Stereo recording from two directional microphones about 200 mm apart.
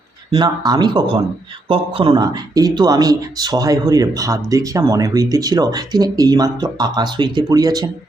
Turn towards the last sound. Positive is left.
turn(degrees=-20)  # may be behind; listen again after turning